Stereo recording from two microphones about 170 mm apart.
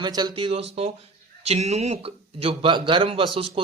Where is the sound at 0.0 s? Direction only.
25° right (ahead or behind).